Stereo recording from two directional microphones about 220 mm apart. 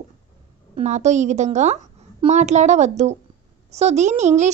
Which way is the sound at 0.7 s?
30° right (ahead or behind).